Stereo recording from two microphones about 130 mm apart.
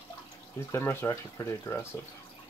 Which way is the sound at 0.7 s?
15° left (ahead or behind).